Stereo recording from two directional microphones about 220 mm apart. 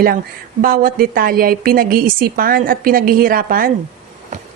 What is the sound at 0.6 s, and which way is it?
Speech, 40° right (ahead or behind).